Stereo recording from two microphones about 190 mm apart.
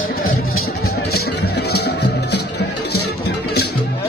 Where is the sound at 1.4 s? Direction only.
60° left (ahead or behind).